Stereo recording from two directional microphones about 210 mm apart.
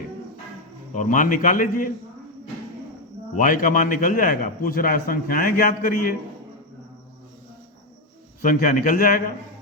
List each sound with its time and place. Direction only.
0.9 s a man's voice: 40° left (ahead or behind)
3.3 s a man's voice: 40° left (ahead or behind)
8.4 s a man's voice: 40° left (ahead or behind)